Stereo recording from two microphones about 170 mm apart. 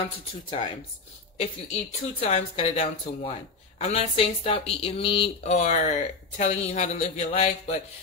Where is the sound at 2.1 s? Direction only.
40° left (ahead or behind).